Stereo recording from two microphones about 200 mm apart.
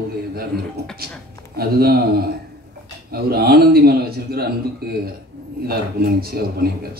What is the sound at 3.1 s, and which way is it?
Speech, 50° right (ahead or behind).